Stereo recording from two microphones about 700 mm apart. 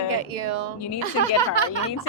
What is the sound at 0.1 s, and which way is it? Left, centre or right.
Speech, right.